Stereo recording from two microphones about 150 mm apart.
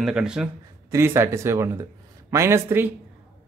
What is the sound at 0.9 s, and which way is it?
Speech, 15° right (ahead or behind).